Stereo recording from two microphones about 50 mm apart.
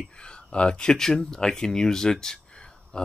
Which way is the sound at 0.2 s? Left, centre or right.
Centre.